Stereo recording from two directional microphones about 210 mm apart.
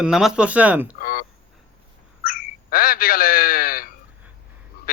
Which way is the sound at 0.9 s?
45° left (ahead or behind).